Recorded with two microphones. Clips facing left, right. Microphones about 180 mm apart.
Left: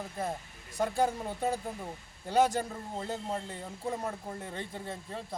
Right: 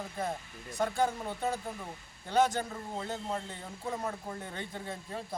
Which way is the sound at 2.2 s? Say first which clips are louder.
Left 1 dB; 10° left (ahead or behind).